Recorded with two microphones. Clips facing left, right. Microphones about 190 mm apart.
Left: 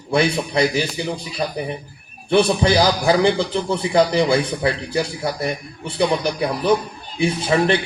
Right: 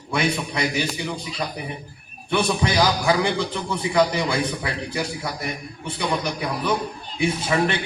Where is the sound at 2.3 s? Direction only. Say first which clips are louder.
Left 6 dB; 30° left (ahead or behind).